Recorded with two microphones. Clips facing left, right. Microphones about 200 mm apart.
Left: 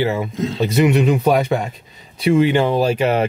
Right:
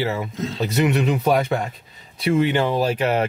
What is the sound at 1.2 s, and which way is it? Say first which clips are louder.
Speech: left 3 dB; 15° left (ahead or behind).